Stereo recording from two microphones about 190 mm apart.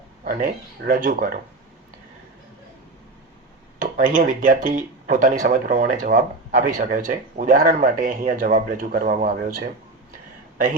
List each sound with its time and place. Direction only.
0.3 s speech: 45° right (ahead or behind)
3.8 s speech: 45° right (ahead or behind)